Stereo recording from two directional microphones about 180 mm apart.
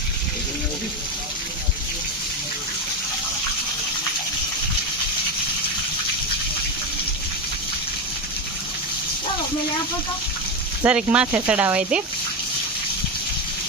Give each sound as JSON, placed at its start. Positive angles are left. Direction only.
{"t": 10.8, "sound": "speech", "side_deg": -5}